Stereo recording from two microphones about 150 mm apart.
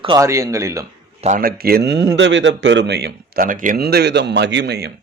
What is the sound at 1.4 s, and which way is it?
Speech, 85° right.